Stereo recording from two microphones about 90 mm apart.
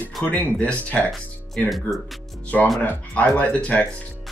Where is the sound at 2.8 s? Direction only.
15° left (ahead or behind).